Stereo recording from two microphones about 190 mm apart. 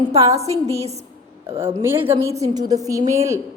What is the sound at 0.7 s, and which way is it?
Speech, 35° right (ahead or behind).